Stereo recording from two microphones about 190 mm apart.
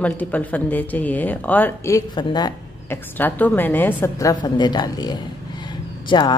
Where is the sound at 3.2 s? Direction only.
10° left (ahead or behind).